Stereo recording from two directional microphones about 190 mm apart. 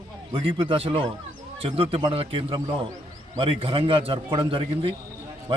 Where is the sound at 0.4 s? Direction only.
30° right (ahead or behind).